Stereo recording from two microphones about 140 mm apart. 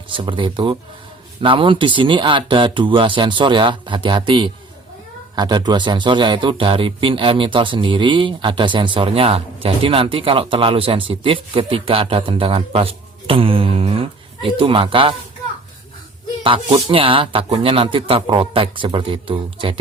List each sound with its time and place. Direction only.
0.1 s speech: 35° right (ahead or behind)
16.4 s speech: 40° right (ahead or behind)